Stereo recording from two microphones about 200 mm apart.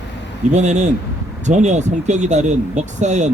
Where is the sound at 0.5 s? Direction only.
35° right (ahead or behind).